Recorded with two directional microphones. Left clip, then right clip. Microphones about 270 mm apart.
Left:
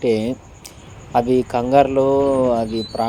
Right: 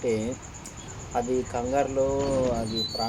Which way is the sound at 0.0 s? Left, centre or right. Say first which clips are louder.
Left 8 dB; left.